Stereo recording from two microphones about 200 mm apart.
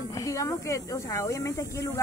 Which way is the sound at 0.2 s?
15° left (ahead or behind).